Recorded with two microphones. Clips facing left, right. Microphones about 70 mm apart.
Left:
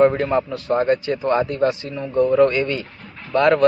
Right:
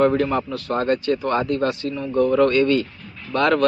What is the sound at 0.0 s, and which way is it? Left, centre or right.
A man's voice, left.